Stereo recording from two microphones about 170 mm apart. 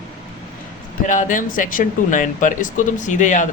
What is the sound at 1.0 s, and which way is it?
Speech, 50° left (ahead or behind).